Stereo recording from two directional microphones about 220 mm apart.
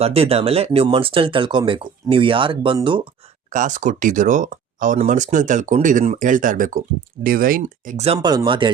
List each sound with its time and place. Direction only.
0.0 s speech: 25° right (ahead or behind)
3.5 s speech: 35° right (ahead or behind)